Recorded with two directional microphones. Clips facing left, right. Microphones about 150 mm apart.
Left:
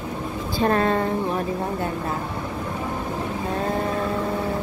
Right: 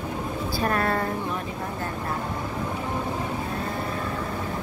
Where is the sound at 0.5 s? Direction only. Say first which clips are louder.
Left 5 dB; 25° left (ahead or behind).